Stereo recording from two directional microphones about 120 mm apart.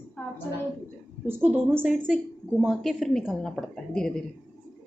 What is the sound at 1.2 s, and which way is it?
A woman's voice, 15° right (ahead or behind).